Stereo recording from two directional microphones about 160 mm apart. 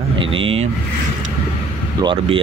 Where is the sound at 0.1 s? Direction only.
35° right (ahead or behind).